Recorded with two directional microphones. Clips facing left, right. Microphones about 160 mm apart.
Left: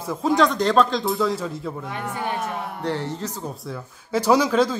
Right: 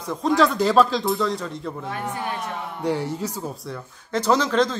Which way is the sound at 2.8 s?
10° right (ahead or behind).